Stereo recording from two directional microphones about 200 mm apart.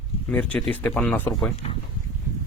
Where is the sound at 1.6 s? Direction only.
30° left (ahead or behind).